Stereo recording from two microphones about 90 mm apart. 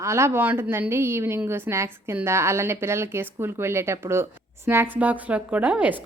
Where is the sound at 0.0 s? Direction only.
30° right (ahead or behind).